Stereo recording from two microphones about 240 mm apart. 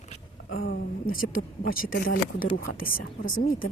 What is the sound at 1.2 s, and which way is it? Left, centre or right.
Speech, left.